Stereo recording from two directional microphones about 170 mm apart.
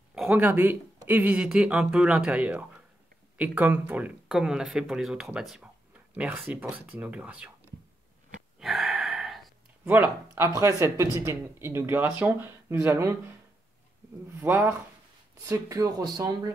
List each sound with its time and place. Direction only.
0.1 s speech: 5° right (ahead or behind)
8.5 s gasp: centre (ahead or behind)
9.8 s speech: 15° right (ahead or behind)
14.3 s speech: 15° right (ahead or behind)